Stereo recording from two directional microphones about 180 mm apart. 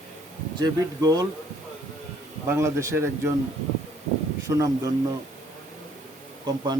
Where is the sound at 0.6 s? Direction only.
20° right (ahead or behind).